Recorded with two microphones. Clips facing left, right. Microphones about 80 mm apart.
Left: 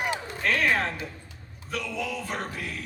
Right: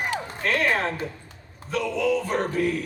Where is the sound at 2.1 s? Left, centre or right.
Right.